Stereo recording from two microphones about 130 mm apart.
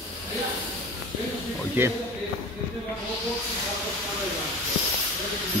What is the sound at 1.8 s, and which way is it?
Speech, 15° right (ahead or behind).